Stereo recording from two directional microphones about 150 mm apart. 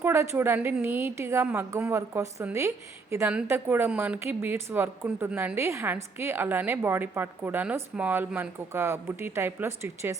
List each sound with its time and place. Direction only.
0.0 s a woman's voice: 15° right (ahead or behind)